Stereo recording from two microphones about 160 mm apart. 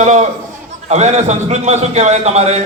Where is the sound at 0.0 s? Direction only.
45° right (ahead or behind).